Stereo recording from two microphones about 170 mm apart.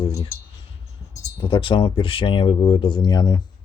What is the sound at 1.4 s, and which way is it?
Speech, 30° left (ahead or behind).